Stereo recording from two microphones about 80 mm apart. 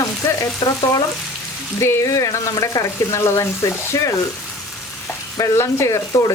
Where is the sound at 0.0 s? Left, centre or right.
Left.